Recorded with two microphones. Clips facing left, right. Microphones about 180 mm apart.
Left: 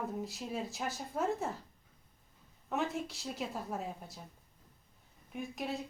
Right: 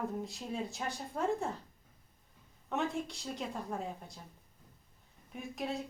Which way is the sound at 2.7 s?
Centre (ahead or behind).